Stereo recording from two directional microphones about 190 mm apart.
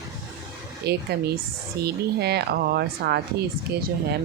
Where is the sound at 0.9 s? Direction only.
60° right (ahead or behind).